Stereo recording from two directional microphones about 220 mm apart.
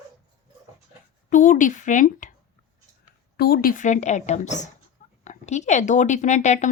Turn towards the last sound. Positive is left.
turn(degrees=30)  # may be behind; listen again after turning